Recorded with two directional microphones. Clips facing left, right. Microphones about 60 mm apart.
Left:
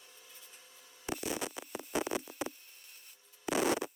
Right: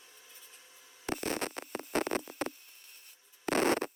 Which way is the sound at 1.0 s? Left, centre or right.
Right.